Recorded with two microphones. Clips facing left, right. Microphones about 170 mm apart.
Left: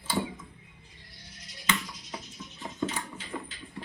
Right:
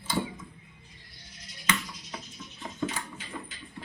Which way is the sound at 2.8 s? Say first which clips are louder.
Left 1 dB; 20° left (ahead or behind).